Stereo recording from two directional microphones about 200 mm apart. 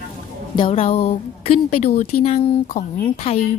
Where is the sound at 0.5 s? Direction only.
25° left (ahead or behind).